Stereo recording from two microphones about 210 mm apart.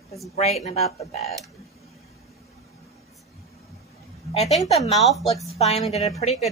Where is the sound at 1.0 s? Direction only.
30° left (ahead or behind).